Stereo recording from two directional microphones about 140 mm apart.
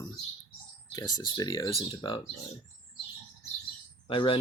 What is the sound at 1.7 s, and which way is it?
Speech, 40° left (ahead or behind).